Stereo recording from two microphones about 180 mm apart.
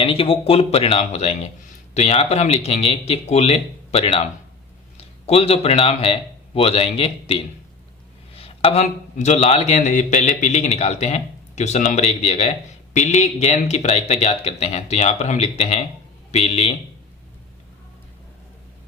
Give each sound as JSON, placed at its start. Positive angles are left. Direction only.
{"t": 0.0, "sound": "speech", "side_deg": 30}